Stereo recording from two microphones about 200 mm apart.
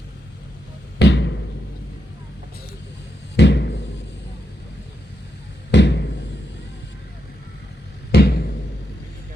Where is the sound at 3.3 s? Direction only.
60° left (ahead or behind).